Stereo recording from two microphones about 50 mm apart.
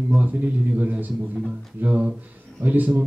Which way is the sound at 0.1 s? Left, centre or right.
Right.